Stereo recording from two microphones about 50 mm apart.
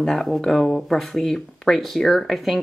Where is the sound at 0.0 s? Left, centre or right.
Centre.